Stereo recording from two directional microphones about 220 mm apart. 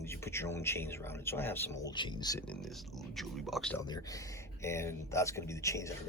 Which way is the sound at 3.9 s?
15° left (ahead or behind).